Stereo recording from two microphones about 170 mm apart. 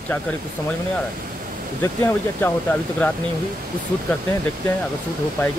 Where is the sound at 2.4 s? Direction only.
10° left (ahead or behind).